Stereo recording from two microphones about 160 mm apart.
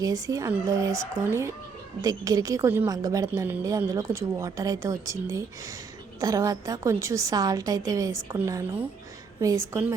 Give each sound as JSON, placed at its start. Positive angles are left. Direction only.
{"t": 0.0, "sound": "a woman's voice", "side_deg": -20}